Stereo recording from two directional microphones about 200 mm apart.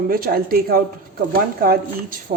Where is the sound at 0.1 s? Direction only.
50° right (ahead or behind).